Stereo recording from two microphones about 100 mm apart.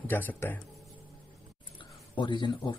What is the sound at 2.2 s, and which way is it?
Speech, 45° left (ahead or behind).